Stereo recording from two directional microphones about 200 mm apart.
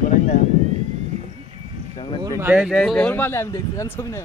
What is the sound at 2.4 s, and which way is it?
Speech, 5° right (ahead or behind).